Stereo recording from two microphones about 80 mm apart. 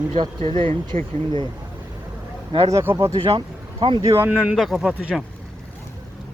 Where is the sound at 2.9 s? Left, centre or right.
Right.